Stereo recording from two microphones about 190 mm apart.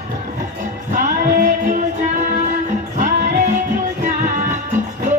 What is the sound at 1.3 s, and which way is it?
Music, 45° right (ahead or behind).